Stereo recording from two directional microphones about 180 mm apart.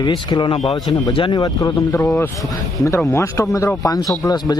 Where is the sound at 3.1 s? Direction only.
15° left (ahead or behind).